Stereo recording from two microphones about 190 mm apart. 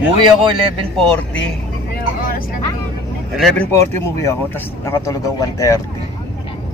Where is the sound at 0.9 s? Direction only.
5° left (ahead or behind).